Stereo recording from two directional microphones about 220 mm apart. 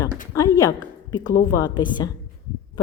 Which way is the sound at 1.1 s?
20° left (ahead or behind).